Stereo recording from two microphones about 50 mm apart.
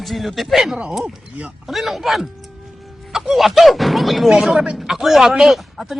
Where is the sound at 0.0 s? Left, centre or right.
Centre.